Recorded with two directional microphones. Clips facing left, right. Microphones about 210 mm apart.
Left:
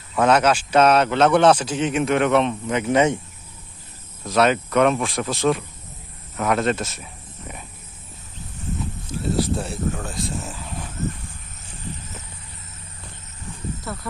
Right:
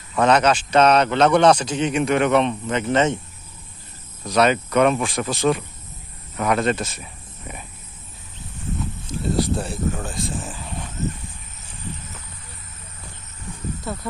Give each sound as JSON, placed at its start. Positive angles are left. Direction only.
{"t": 0.2, "sound": "a man's voice", "side_deg": 5}
{"t": 4.2, "sound": "speech", "side_deg": 0}
{"t": 9.4, "sound": "speech", "side_deg": 0}
{"t": 13.9, "sound": "speech", "side_deg": -25}